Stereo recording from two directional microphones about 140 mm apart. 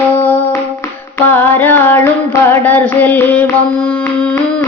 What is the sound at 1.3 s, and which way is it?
Female singing, 15° left (ahead or behind).